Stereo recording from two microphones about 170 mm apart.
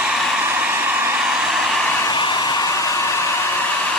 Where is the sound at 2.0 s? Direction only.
25° left (ahead or behind).